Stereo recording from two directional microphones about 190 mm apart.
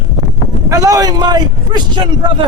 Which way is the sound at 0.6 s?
15° right (ahead or behind).